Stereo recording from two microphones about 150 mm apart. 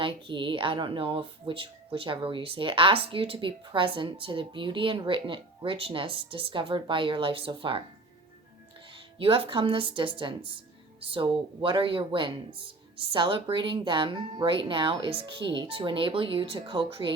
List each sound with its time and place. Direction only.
0.0 s speech: 35° right (ahead or behind)
9.1 s speech: 40° right (ahead or behind)